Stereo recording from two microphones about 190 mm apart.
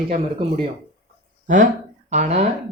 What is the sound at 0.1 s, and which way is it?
Speech, 30° right (ahead or behind).